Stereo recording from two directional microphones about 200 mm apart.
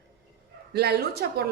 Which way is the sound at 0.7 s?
55° right (ahead or behind).